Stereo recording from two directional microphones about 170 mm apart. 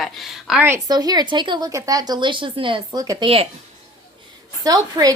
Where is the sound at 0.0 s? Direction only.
Centre (ahead or behind).